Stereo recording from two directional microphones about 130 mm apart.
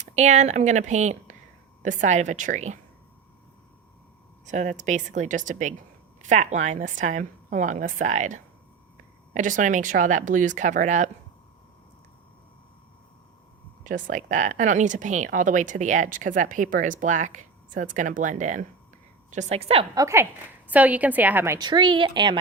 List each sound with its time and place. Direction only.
0.0 s speech: 65° right (ahead or behind)
4.4 s speech: 70° right (ahead or behind)
13.8 s speech: 75° right (ahead or behind)
19.3 s a woman's voice: 60° right (ahead or behind)
20.0 s a woman's voice: 20° right (ahead or behind)
21.6 s speech: 35° right (ahead or behind)